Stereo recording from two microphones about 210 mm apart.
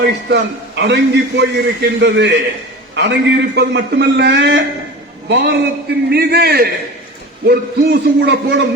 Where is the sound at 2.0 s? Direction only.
55° right (ahead or behind).